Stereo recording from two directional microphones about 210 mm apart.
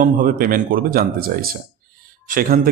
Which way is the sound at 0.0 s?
40° right (ahead or behind).